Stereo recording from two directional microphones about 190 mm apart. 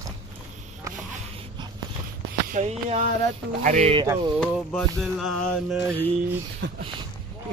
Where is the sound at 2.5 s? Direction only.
40° right (ahead or behind).